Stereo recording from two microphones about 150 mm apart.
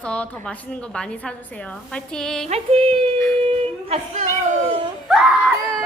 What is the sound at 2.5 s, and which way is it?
Music, 40° right (ahead or behind).